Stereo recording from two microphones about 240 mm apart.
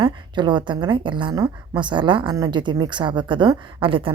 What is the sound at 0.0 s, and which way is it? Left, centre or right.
Speech, centre.